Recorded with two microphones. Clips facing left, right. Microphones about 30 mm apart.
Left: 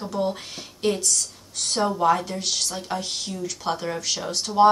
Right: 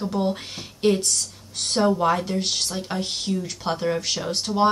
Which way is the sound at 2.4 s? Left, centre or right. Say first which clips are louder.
Right 1 dB; right.